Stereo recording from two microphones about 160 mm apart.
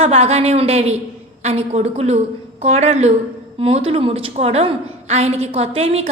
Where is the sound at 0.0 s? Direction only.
40° right (ahead or behind).